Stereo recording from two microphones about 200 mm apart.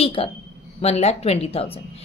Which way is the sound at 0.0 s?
30° left (ahead or behind).